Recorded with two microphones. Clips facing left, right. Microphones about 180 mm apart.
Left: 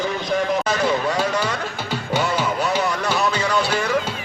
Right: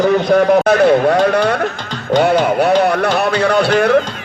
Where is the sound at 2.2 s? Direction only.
60° right (ahead or behind).